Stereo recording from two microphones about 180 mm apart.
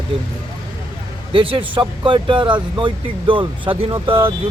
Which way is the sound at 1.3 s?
30° right (ahead or behind).